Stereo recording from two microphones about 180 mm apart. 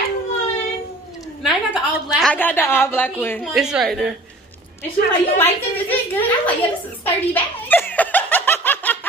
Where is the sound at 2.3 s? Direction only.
10° left (ahead or behind).